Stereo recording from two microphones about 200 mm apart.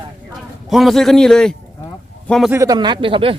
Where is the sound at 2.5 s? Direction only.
20° right (ahead or behind).